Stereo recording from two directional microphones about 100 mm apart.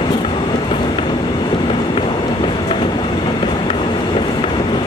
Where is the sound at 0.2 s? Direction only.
60° left (ahead or behind).